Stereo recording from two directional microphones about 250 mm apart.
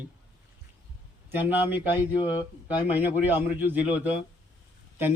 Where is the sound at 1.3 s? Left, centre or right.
Centre.